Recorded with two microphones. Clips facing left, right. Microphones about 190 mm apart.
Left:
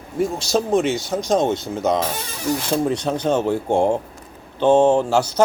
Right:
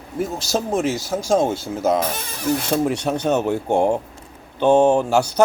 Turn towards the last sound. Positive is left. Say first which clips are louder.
# even
turn(degrees=-10)  # may be behind; listen again after turning